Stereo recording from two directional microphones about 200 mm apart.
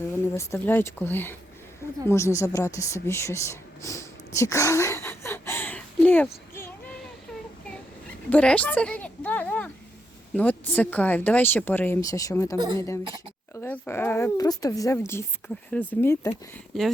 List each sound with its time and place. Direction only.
0.1 s speech: 15° left (ahead or behind)
2.0 s a sound: 15° left (ahead or behind)
8.3 s a woman's voice: 5° left (ahead or behind)